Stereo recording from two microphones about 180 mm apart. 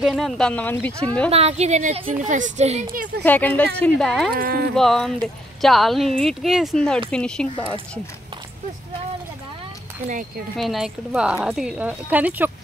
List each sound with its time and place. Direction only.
0.0 s speech: centre (ahead or behind)
1.3 s a woman's voice: 35° right (ahead or behind)
2.9 s speech: 50° right (ahead or behind)
3.3 s speech: 10° left (ahead or behind)
4.3 s speech: 55° right (ahead or behind)
4.7 s speech: centre (ahead or behind)
7.5 s speech: 30° left (ahead or behind)
10.0 s speech: 45° right (ahead or behind)
10.6 s speech: centre (ahead or behind)